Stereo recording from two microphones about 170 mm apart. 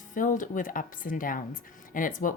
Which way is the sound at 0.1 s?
50° left (ahead or behind).